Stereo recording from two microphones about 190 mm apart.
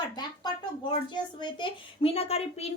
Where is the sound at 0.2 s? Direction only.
25° left (ahead or behind).